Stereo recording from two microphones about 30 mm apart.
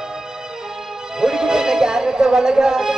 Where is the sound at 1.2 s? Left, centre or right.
Centre.